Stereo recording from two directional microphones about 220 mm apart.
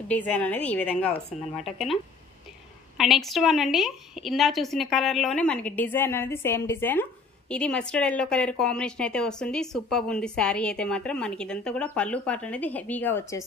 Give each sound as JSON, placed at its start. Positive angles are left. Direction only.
{"t": 0.1, "sound": "a woman's voice", "side_deg": 5}
{"t": 3.0, "sound": "a woman's voice", "side_deg": 0}